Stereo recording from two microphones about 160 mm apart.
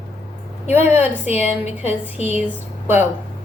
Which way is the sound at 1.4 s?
45° left (ahead or behind).